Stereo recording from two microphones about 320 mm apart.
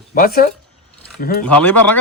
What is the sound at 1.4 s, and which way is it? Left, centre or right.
Speech, centre.